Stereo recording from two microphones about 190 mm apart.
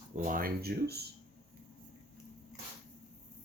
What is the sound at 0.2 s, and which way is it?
Speech, 45° right (ahead or behind).